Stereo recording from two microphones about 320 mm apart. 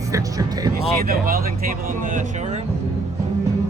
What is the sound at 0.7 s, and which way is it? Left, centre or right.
Speech, right.